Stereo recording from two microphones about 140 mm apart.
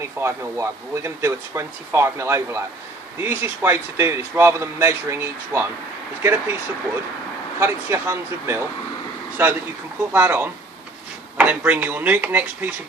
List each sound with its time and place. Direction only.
0.2 s a man's voice: 20° right (ahead or behind)
7.6 s a man's voice: 20° right (ahead or behind)
10.0 s speech: 15° right (ahead or behind)